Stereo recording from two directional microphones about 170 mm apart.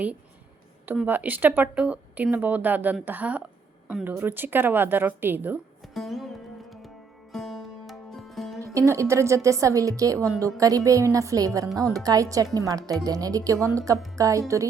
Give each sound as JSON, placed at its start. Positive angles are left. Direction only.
{"t": 0.9, "sound": "speech", "side_deg": -10}
{"t": 5.8, "sound": "music", "side_deg": 0}
{"t": 8.6, "sound": "speech", "side_deg": -15}